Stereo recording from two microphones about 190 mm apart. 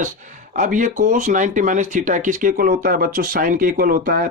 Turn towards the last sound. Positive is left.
turn(degrees=-50)  # may be behind; listen again after turning